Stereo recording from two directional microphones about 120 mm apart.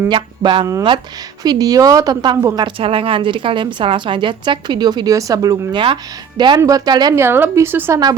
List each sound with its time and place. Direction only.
0.1 s a woman's voice: 40° right (ahead or behind)
2.6 s a woman's voice: 45° right (ahead or behind)
6.6 s a woman's voice: 30° right (ahead or behind)
7.2 s a woman's voice: 20° right (ahead or behind)